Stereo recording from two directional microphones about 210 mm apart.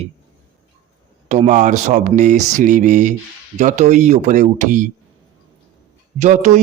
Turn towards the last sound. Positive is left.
turn(degrees=-35)  # may be behind; listen again after turning